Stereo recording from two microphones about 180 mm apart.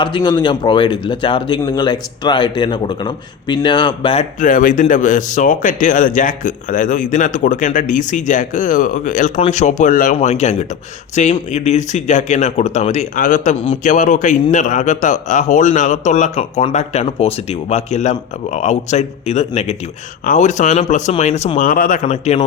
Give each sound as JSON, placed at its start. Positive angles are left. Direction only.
{"t": 0.0, "sound": "speech", "side_deg": 25}
{"t": 22.0, "sound": "speech", "side_deg": 35}